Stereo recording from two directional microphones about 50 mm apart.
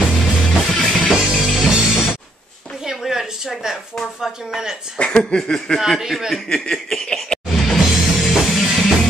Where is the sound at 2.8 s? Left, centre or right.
Centre.